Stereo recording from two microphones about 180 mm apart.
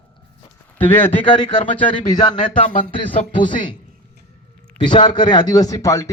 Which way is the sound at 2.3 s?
45° left (ahead or behind).